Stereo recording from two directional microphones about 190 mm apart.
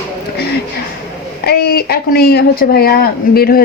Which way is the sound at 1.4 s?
55° left (ahead or behind).